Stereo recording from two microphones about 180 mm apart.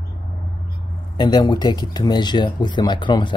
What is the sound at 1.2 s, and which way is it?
Speech, 25° left (ahead or behind).